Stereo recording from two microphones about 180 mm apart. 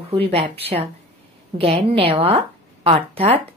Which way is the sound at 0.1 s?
30° right (ahead or behind).